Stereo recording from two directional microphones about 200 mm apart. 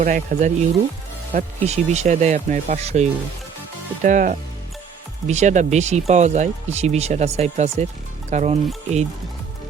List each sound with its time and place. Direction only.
0.0 s speech: 45° right (ahead or behind)